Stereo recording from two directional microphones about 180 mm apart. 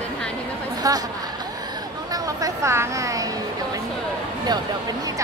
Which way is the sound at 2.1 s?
20° right (ahead or behind).